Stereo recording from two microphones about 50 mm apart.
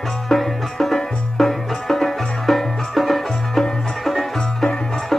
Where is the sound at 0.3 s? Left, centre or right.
Centre.